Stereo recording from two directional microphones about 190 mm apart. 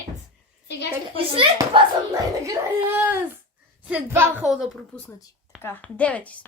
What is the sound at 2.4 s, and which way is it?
Speech, 10° right (ahead or behind).